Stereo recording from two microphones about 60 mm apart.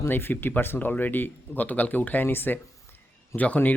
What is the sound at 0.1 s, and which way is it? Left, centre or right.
Speech, left.